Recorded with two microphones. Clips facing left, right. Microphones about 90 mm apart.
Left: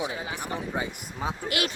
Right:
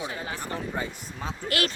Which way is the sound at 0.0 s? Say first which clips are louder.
Left 2 dB; 15° left (ahead or behind).